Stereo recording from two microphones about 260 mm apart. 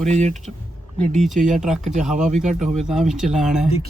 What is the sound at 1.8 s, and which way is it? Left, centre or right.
Speech, right.